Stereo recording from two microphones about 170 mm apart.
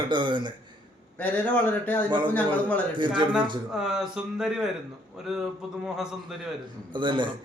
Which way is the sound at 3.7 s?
5° right (ahead or behind).